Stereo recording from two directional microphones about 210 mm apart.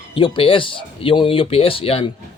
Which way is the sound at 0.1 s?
25° left (ahead or behind).